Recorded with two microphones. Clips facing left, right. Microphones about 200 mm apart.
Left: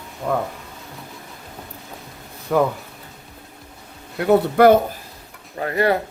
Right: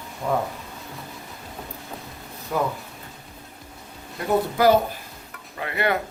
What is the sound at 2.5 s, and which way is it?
Speech, 75° left (ahead or behind).